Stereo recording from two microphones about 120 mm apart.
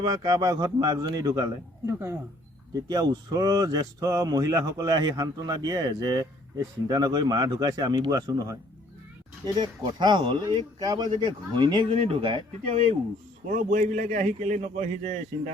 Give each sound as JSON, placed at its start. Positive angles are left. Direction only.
{"t": 0.0, "sound": "speech", "side_deg": -30}
{"t": 1.9, "sound": "speech", "side_deg": -20}
{"t": 9.6, "sound": "speech", "side_deg": -35}
{"t": 11.9, "sound": "speech", "side_deg": -50}
{"t": 13.5, "sound": "a man's voice", "side_deg": -90}